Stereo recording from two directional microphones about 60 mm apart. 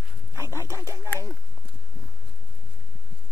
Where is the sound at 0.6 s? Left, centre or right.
Right.